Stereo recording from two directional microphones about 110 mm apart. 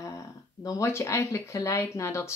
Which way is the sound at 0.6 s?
30° left (ahead or behind).